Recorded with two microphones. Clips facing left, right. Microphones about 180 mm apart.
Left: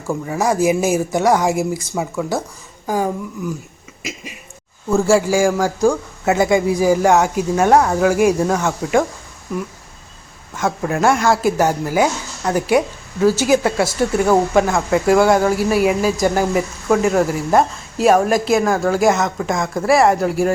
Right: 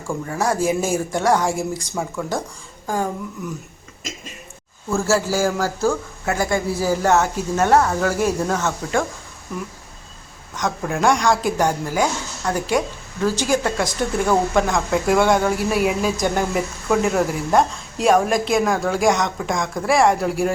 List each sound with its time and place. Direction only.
0.1 s a man's voice: 10° left (ahead or behind)
10.6 s a man's voice: centre (ahead or behind)